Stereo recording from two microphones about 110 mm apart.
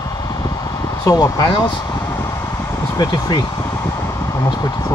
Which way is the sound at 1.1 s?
35° left (ahead or behind).